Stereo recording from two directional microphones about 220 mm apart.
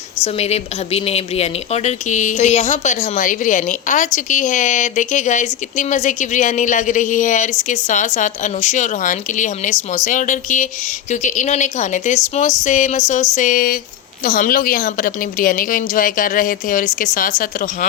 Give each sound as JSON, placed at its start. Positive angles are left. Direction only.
{"t": 0.3, "sound": "speech", "side_deg": 30}